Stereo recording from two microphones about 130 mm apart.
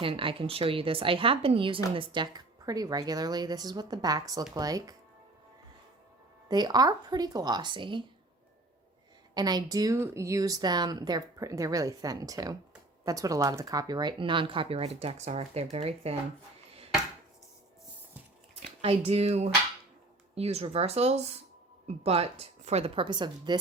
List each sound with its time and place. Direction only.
0.0 s a woman's voice: 40° right (ahead or behind)
6.5 s speech: 30° right (ahead or behind)
9.3 s a woman's voice: 30° right (ahead or behind); by 16.1 s 50° right (ahead or behind)
18.8 s a woman's voice: 50° right (ahead or behind)
23.0 s speech: 35° right (ahead or behind)